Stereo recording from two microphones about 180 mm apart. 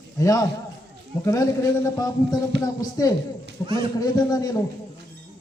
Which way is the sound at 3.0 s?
20° left (ahead or behind).